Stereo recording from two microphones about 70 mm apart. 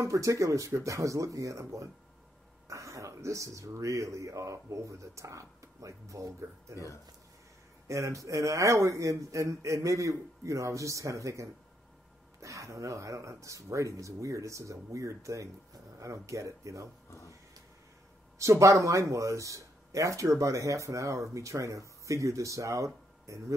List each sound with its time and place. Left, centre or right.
0.0 s speech: right
7.9 s speech: right
18.4 s speech: right